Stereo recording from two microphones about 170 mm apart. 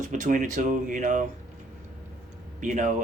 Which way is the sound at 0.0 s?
45° right (ahead or behind).